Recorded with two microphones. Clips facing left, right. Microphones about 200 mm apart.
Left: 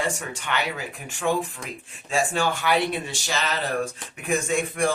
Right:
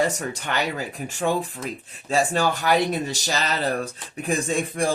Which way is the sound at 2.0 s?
40° right (ahead or behind).